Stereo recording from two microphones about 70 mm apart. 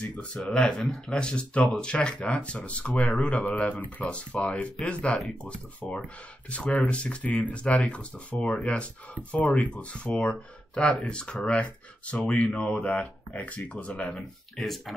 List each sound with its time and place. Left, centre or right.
0.0 s speech: centre
8.4 s speech: centre
9.3 s speech: left
14.1 s speech: centre